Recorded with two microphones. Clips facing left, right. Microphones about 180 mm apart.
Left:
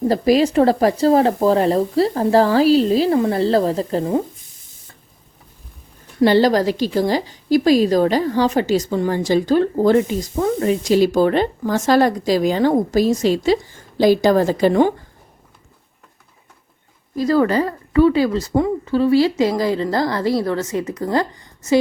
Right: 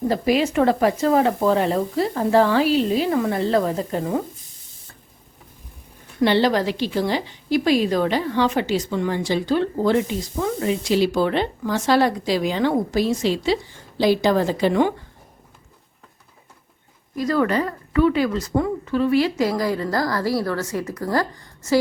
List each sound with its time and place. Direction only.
0.1 s a woman's voice: 35° left (ahead or behind)
6.2 s a woman's voice: 40° left (ahead or behind)
17.2 s a woman's voice: 30° left (ahead or behind)